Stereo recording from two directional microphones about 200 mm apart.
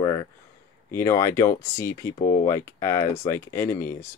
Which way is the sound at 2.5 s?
15° left (ahead or behind).